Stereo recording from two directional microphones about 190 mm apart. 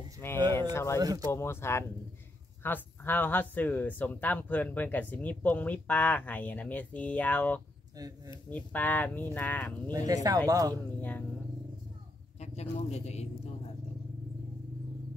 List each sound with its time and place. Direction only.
0.2 s speech: 10° left (ahead or behind)
0.9 s speech: 20° right (ahead or behind)
1.3 s speech: 15° left (ahead or behind)
9.8 s speech: 20° right (ahead or behind)
11.0 s speech: 10° left (ahead or behind)
12.4 s speech: 35° left (ahead or behind)